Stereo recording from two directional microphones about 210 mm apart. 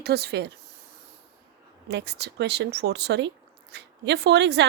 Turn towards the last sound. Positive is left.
turn(degrees=-55)  # may be behind; listen again after turning